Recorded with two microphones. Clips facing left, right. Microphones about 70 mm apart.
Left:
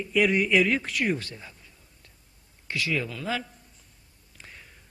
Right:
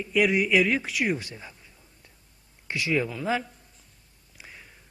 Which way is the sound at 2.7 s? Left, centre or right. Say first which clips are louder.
Right 3 dB; right.